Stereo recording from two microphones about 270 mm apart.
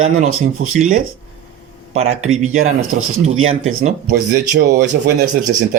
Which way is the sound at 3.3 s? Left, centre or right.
Right.